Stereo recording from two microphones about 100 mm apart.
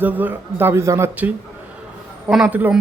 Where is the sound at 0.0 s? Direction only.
20° right (ahead or behind).